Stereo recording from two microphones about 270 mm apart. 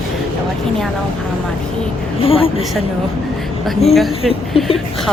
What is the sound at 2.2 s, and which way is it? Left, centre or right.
Speech, left.